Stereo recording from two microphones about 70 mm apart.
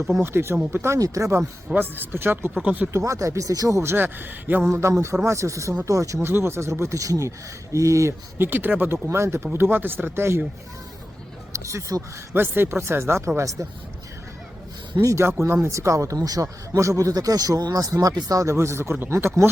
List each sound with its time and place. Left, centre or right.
0.2 s speech: right
0.9 s speech: right
1.8 s speech: right
2.6 s speech: centre
2.9 s speech: right
3.9 s speech: right
4.7 s speech: right
6.2 s speech: right
8.4 s speech: right
9.0 s speech: right
11.5 s a sound: right
12.3 s speech: right
15.0 s speech: right
18.4 s speech: right